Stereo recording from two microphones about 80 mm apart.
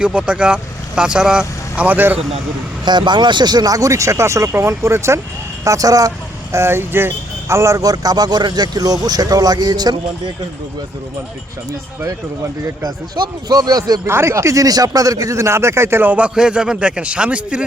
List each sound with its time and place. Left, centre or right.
0.0 s speech: centre
2.8 s a man's voice: right
6.5 s a man's voice: right
12.8 s a man's voice: right
14.1 s speech: right
16.0 s speech: centre